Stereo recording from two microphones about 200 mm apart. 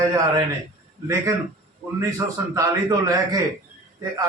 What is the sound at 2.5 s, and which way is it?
Speech, 15° right (ahead or behind).